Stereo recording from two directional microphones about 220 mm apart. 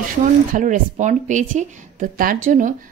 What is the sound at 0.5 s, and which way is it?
Speech, 35° right (ahead or behind).